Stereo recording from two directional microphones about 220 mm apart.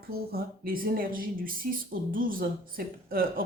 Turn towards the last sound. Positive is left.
turn(degrees=-40)  # may be behind; listen again after turning